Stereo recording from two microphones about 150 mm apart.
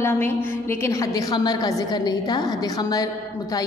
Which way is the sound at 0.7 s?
20° left (ahead or behind).